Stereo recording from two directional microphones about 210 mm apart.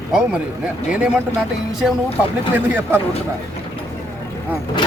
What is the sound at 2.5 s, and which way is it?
Speech, 10° right (ahead or behind).